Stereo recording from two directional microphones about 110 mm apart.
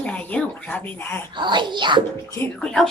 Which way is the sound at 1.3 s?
45° right (ahead or behind).